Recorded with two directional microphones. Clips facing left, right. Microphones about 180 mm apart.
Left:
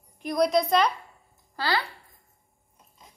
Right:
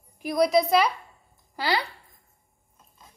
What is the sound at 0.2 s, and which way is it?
Speech, 5° right (ahead or behind).